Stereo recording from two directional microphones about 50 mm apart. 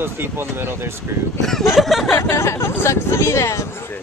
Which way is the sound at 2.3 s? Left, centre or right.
Left.